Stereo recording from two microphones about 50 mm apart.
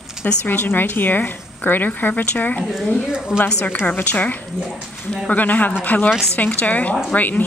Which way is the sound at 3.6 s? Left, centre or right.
Left.